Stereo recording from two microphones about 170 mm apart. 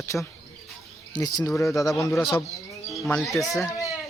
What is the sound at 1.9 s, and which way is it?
Speech, centre (ahead or behind).